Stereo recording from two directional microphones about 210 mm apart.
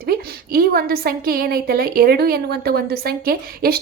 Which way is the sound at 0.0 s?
45° right (ahead or behind).